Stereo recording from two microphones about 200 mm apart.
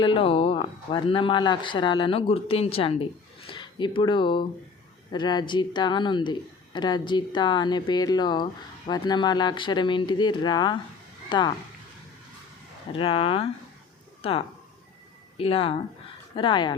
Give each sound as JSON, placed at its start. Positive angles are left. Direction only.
{"t": 0.0, "sound": "speech", "side_deg": 25}
{"t": 12.9, "sound": "speech", "side_deg": 25}